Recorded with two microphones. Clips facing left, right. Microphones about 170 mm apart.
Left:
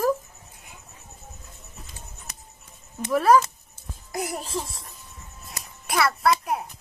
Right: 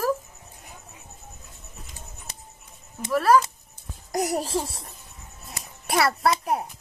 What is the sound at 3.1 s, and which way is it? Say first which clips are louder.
Speech: left 1 dB; 15° left (ahead or behind).